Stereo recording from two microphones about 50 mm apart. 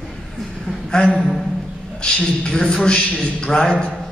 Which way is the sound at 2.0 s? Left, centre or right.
Centre.